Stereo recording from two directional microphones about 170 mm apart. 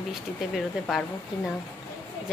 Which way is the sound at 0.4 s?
Centre (ahead or behind).